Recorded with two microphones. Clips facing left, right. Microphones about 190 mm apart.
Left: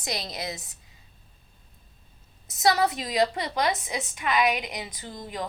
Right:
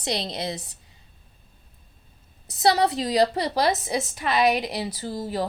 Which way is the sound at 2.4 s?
30° right (ahead or behind).